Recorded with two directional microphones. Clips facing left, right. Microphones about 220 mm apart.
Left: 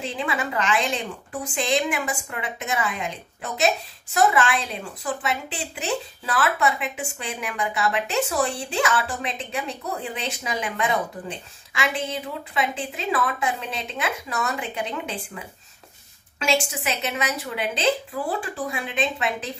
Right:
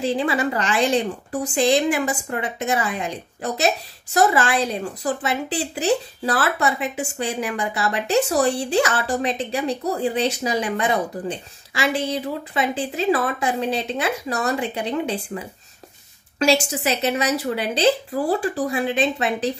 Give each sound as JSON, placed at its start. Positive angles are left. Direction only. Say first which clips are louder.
{"t": 0.0, "sound": "a woman's voice", "louder": "right 7 dB", "side_deg": -35}
{"t": 4.1, "sound": "a woman's voice", "louder": "right 2 dB", "side_deg": -40}